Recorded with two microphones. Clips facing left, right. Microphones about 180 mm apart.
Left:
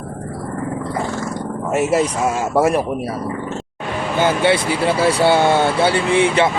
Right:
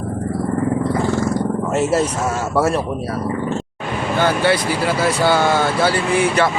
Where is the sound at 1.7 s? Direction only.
10° left (ahead or behind).